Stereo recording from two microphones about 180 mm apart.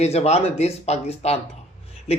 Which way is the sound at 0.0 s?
35° left (ahead or behind).